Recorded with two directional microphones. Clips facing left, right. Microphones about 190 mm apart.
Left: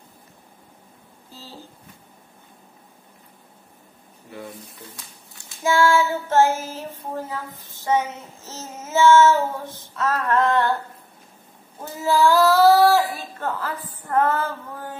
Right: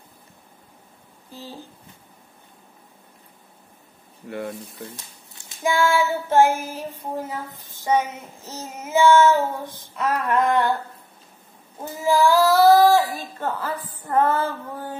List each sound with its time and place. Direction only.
1.3 s child singing: 15° right (ahead or behind)
4.3 s speech: 70° right (ahead or behind)
5.6 s child singing: 15° right (ahead or behind)
11.8 s child singing: 15° right (ahead or behind)